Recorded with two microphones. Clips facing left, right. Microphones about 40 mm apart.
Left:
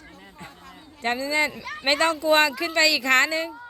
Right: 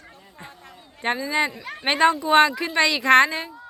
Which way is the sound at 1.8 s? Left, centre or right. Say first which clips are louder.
Right 3 dB; centre.